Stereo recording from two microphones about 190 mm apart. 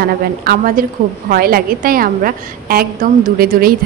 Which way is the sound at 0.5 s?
45° right (ahead or behind).